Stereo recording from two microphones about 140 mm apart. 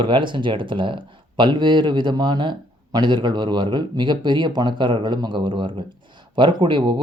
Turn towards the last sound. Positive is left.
turn(degrees=-35)  # may be behind; listen again after turning